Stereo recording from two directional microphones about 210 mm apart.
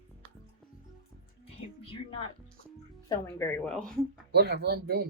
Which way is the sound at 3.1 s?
10° left (ahead or behind).